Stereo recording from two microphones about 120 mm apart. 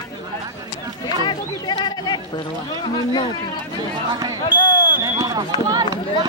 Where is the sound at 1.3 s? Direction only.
35° left (ahead or behind).